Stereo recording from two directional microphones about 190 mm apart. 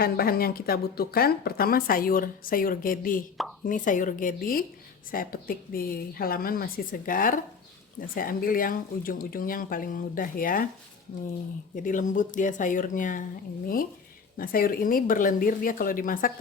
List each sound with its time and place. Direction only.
0.0 s speech: 50° left (ahead or behind)
11.8 s speech: 40° left (ahead or behind)
14.3 s speech: 50° left (ahead or behind)